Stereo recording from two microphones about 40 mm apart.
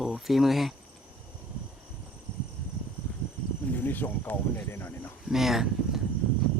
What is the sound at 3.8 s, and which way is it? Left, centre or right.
Speech, left.